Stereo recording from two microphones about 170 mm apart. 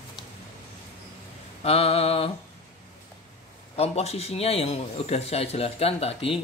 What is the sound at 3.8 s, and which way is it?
A man's voice, 40° left (ahead or behind).